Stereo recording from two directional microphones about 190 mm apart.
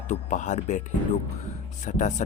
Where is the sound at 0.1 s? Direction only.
40° left (ahead or behind).